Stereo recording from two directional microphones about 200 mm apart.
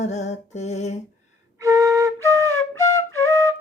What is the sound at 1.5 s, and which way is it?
Flute, 15° right (ahead or behind).